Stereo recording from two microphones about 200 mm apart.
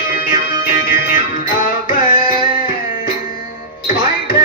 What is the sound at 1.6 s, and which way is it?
Music, 45° left (ahead or behind).